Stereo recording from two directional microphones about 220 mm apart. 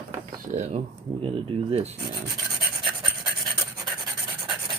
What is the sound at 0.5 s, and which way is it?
Speech, 30° right (ahead or behind).